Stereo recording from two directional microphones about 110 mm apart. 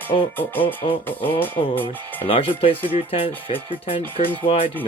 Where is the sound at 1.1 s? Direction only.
20° left (ahead or behind).